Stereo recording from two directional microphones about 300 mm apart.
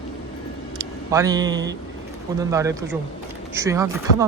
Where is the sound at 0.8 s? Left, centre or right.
Centre.